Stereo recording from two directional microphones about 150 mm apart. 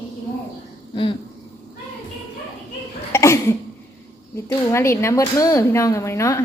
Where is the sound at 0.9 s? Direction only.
35° left (ahead or behind).